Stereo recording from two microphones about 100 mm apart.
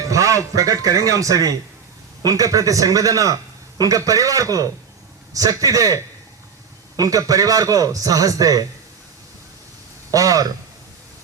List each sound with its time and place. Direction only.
0.0 s a man's voice: 35° right (ahead or behind)
10.1 s speech: 35° right (ahead or behind)